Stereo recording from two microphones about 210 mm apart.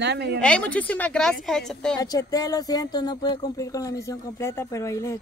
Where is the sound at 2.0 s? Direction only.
15° left (ahead or behind).